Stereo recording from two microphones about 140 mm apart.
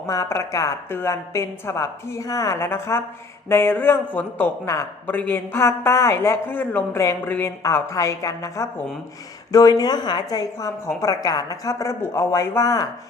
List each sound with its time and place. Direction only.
0.1 s a woman's voice: 20° left (ahead or behind)